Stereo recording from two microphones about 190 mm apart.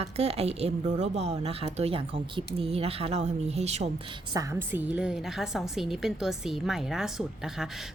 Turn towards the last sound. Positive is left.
turn(degrees=0)  # may be behind; listen again after turning